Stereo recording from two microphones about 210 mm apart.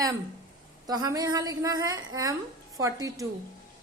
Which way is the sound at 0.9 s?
20° right (ahead or behind).